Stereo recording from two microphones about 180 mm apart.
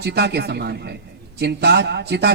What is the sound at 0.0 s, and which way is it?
A man's voice, 65° right (ahead or behind).